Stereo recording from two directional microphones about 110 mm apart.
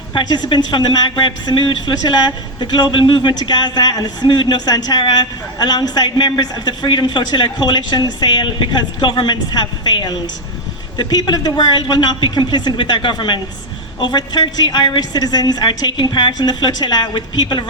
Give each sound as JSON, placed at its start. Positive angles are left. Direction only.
{"t": 0.1, "sound": "a woman's voice", "side_deg": 45}